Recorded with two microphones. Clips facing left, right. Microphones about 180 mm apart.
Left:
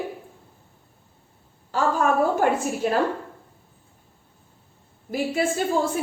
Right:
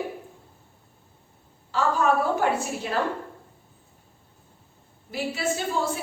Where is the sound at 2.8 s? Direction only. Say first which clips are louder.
Left 7 dB; 45° left (ahead or behind).